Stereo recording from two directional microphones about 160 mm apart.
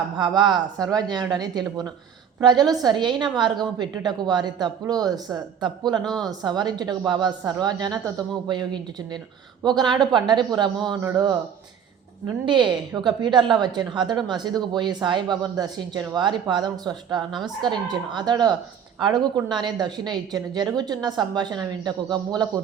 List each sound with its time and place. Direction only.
0.2 s a woman's voice: 25° right (ahead or behind)
9.9 s a woman's voice: 30° right (ahead or behind)
12.5 s a woman's voice: 30° right (ahead or behind)